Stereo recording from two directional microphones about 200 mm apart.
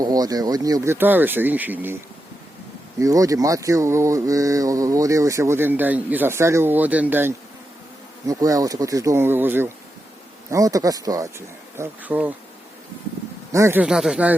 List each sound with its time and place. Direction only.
0.0 s speech: 20° right (ahead or behind)
3.0 s speech: 15° right (ahead or behind)
13.5 s speech: 15° right (ahead or behind)